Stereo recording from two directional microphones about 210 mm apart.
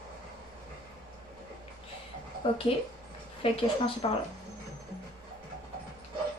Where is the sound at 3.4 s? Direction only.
25° left (ahead or behind).